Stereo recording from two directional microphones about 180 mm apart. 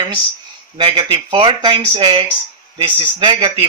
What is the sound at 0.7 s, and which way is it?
Speech, 25° right (ahead or behind).